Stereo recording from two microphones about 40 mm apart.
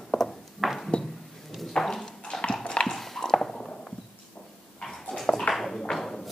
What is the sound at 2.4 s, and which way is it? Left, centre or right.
Dog, left.